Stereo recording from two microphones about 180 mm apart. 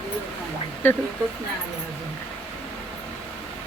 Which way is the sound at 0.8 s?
10° left (ahead or behind).